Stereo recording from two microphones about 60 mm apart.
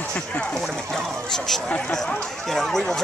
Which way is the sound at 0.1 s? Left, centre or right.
Centre.